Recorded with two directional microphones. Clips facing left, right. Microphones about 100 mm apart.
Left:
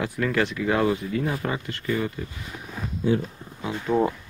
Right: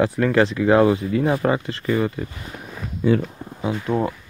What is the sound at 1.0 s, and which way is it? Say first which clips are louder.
Speech: right 7 dB; 80° right.